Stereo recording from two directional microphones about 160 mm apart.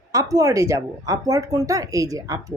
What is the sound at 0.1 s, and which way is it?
Speech, 20° right (ahead or behind).